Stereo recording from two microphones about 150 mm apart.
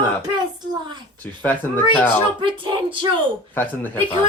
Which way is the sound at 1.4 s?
15° left (ahead or behind).